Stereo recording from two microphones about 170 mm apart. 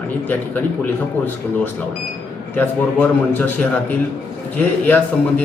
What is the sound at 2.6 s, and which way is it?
A man's voice, 10° left (ahead or behind).